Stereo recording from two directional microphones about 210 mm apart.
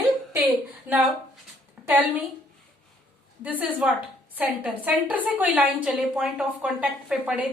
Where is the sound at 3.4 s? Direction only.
5° right (ahead or behind).